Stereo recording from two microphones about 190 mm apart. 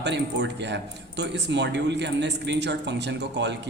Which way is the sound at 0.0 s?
65° right (ahead or behind).